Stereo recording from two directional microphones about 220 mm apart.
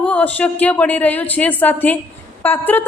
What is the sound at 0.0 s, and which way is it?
Speech, 5° left (ahead or behind).